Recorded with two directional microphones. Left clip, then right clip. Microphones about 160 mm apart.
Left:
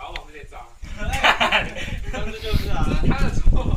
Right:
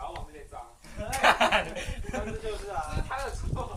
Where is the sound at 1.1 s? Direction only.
Centre (ahead or behind).